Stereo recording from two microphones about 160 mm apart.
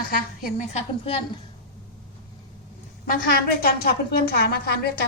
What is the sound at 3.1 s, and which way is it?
A woman's voice, 65° left (ahead or behind).